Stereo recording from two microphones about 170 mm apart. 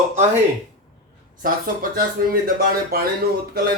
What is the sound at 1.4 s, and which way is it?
Speech, 55° right (ahead or behind).